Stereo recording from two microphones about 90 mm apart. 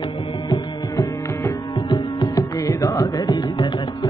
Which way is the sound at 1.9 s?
55° left (ahead or behind).